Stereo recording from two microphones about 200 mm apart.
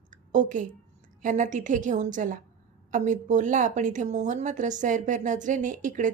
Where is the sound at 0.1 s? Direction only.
40° right (ahead or behind).